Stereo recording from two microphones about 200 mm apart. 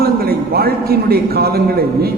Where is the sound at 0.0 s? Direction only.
50° right (ahead or behind).